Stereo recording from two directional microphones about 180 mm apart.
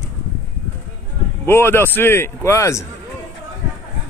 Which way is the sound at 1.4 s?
15° left (ahead or behind).